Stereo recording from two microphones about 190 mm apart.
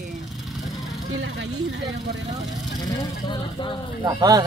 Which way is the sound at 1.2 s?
70° right (ahead or behind).